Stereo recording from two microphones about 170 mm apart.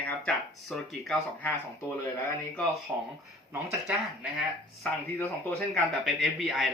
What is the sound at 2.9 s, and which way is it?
Speech, 10° right (ahead or behind).